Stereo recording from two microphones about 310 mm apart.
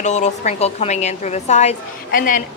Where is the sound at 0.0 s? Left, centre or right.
Left.